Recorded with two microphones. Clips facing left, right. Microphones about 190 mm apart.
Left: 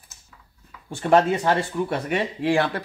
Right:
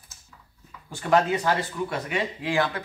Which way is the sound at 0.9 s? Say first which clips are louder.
Left 4 dB; 30° left (ahead or behind).